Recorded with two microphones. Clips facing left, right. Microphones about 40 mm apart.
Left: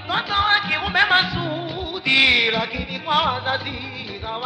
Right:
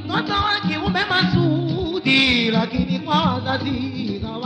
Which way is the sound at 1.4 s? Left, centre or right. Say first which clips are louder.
Right 6 dB; left.